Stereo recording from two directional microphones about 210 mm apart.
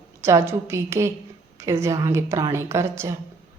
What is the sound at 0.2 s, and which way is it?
Speech, 10° right (ahead or behind).